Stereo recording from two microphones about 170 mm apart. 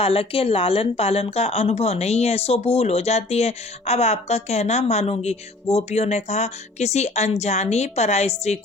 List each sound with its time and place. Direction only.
0.0 s a woman's voice: 35° left (ahead or behind)